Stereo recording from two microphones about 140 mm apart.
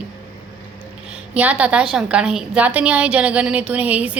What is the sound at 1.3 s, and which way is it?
A woman's voice, 10° right (ahead or behind).